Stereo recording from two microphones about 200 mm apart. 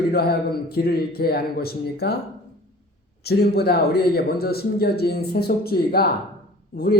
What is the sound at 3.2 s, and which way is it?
Speech, 55° left (ahead or behind).